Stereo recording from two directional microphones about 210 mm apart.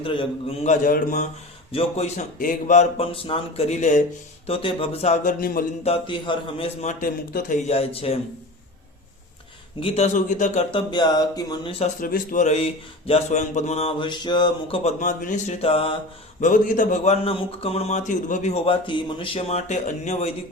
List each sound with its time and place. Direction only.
0.0 s speech: 25° left (ahead or behind); by 1.3 s 40° left (ahead or behind)
1.7 s speech: 30° left (ahead or behind)
5.8 s speech: 25° left (ahead or behind)
6.8 s speech: 40° left (ahead or behind)
9.8 s speech: 30° left (ahead or behind)
11.9 s speech: 40° left (ahead or behind)
16.4 s speech: 40° left (ahead or behind)